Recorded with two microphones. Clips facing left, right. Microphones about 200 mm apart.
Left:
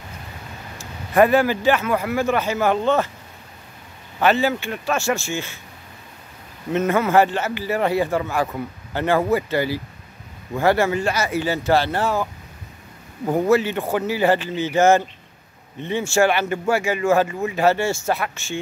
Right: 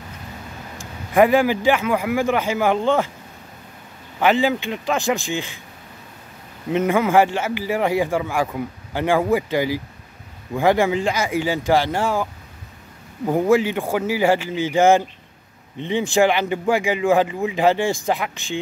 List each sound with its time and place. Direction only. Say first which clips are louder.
1.1 s a man's voice: right 1 dB; 15° right (ahead or behind)
4.2 s a man's voice: right 1 dB; 15° right (ahead or behind)
6.7 s a man's voice: right 1 dB; 15° right (ahead or behind)